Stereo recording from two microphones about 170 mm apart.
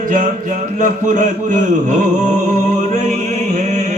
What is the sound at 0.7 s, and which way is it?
A man's voice, 45° right (ahead or behind).